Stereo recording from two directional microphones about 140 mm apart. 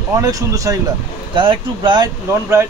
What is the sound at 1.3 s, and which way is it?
Speech, 35° right (ahead or behind).